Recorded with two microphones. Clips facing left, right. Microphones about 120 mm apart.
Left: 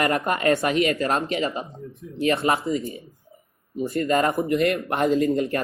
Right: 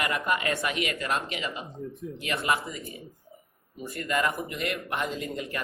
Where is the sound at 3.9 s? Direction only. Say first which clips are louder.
Left 7 dB; 35° left (ahead or behind).